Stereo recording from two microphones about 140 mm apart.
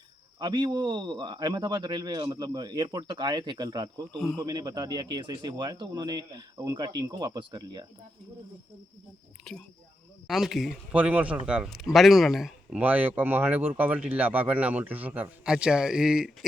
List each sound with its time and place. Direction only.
0.3 s a man's voice: 30° right (ahead or behind)
9.4 s speech: 5° left (ahead or behind)